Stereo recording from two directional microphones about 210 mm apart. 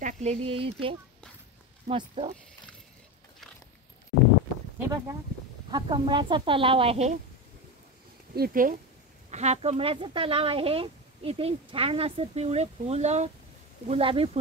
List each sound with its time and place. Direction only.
0.0 s speech: 30° right (ahead or behind)
4.8 s speech: 15° right (ahead or behind)
8.4 s speech: 40° right (ahead or behind)